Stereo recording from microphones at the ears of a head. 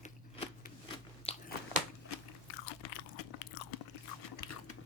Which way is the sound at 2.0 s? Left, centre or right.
Left.